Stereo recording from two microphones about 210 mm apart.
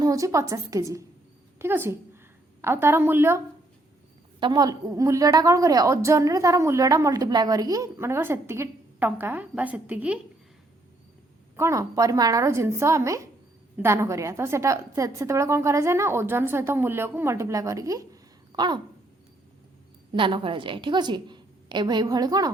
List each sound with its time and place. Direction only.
0.0 s a woman's voice: 15° right (ahead or behind)
11.5 s a woman's voice: 15° right (ahead or behind)
20.1 s a woman's voice: 25° right (ahead or behind)